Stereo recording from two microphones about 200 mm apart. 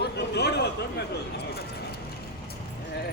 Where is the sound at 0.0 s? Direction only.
55° left (ahead or behind).